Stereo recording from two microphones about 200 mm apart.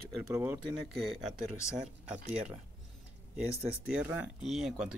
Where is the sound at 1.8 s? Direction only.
35° right (ahead or behind).